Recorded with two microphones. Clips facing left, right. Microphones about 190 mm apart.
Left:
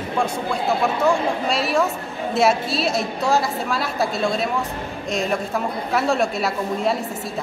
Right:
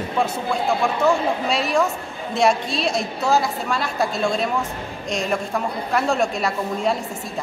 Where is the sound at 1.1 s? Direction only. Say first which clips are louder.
Right 2 dB; centre (ahead or behind).